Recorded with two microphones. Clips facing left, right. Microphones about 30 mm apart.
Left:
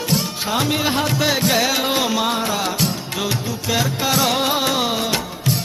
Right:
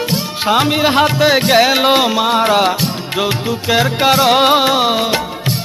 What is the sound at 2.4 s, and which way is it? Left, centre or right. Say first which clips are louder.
Music: right 10 dB; right.